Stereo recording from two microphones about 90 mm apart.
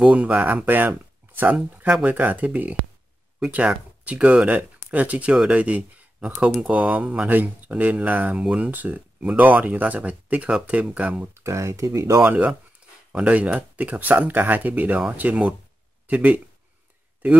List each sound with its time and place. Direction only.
0.0 s speech: 15° right (ahead or behind)
8.6 s speech: 20° right (ahead or behind)
11.3 s speech: 35° right (ahead or behind)
12.3 s speech: 15° right (ahead or behind)